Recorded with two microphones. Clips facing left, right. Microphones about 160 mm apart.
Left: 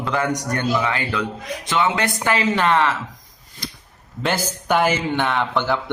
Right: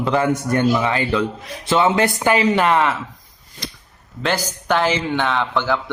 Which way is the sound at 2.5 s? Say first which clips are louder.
Right 2 dB; 5° right (ahead or behind).